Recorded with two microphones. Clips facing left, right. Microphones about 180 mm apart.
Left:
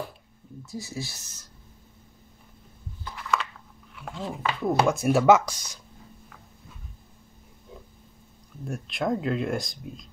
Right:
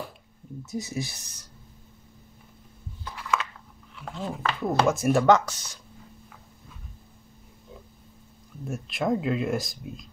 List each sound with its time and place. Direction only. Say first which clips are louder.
0.7 s speech: right 4 dB; 20° right (ahead or behind)
3.2 s a sound: even; 5° right (ahead or behind)
3.9 s speech: right 1 dB; centre (ahead or behind)
8.6 s speech: right 1 dB; centre (ahead or behind)